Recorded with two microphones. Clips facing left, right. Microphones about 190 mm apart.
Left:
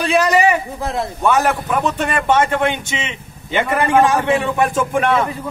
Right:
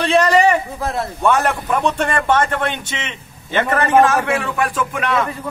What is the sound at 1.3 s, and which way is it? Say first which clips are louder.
A man's voice: left 2 dB; 5° left (ahead or behind).